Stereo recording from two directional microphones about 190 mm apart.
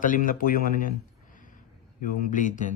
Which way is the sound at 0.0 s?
45° left (ahead or behind).